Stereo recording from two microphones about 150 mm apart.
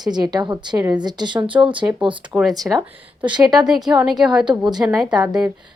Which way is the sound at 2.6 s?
10° right (ahead or behind).